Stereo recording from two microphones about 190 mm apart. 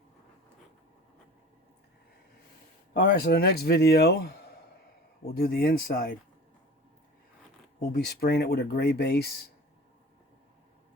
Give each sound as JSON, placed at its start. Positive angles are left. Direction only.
{"t": 2.9, "sound": "speech", "side_deg": 55}
{"t": 7.8, "sound": "speech", "side_deg": 55}